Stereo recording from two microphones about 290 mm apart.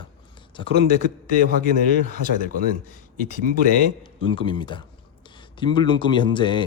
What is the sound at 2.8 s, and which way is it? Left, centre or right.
Speech, left.